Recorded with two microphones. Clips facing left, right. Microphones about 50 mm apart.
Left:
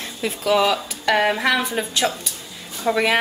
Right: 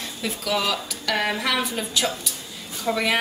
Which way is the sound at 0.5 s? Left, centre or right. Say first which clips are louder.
Left 7 dB; left.